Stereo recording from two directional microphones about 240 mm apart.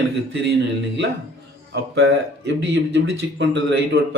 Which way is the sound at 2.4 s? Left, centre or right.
Right.